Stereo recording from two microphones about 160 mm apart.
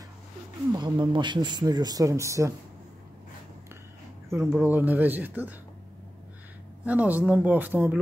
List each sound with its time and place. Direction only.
0.7 s speech: 30° right (ahead or behind)
4.5 s speech: 10° right (ahead or behind)
6.8 s speech: 10° right (ahead or behind)